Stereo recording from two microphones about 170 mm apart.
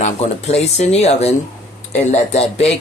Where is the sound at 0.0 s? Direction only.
40° left (ahead or behind).